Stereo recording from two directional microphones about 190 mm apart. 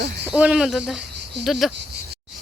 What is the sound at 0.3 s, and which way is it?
Speech, 5° right (ahead or behind).